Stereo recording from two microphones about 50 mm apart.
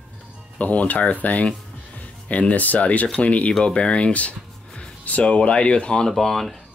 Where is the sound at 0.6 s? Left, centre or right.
Left.